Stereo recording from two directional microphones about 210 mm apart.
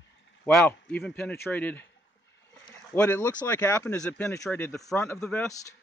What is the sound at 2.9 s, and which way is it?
Speech, 10° left (ahead or behind).